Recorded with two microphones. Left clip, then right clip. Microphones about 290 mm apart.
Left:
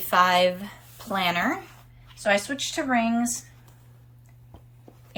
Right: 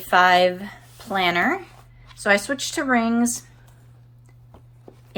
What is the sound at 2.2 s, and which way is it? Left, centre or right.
Speech, centre.